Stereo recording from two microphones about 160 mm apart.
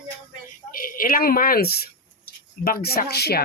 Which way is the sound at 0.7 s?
65° left (ahead or behind).